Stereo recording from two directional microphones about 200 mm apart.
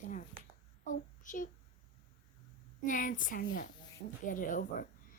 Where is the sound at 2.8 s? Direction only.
40° left (ahead or behind).